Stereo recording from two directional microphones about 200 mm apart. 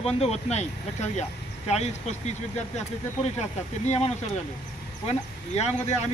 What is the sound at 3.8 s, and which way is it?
Speech, 35° left (ahead or behind).